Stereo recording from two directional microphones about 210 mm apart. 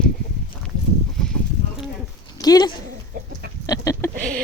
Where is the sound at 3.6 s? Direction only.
15° left (ahead or behind).